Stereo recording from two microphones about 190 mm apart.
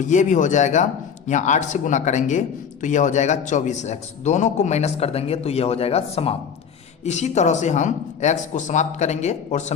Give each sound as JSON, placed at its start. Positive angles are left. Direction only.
{"t": 0.0, "sound": "speech", "side_deg": 40}